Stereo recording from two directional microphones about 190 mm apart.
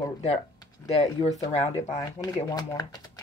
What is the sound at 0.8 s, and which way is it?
Speech, 35° left (ahead or behind).